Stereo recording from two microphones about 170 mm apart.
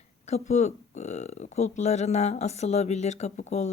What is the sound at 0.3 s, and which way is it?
Speech, 40° left (ahead or behind).